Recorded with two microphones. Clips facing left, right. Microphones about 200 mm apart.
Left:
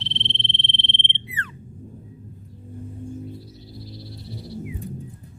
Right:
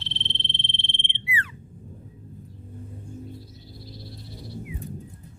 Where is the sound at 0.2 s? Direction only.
25° left (ahead or behind).